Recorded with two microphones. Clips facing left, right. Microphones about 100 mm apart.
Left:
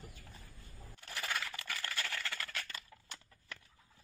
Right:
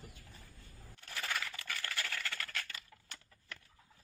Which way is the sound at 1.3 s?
25° left (ahead or behind).